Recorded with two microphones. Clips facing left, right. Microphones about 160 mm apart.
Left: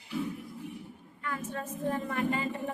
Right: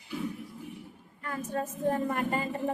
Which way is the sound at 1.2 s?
40° right (ahead or behind).